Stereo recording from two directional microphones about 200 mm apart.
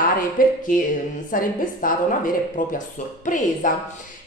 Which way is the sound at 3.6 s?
40° left (ahead or behind).